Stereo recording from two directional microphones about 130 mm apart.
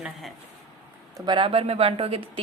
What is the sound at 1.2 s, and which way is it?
Speech, 40° right (ahead or behind).